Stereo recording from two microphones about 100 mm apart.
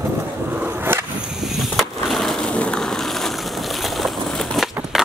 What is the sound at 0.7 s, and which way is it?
Skateboard, 20° right (ahead or behind).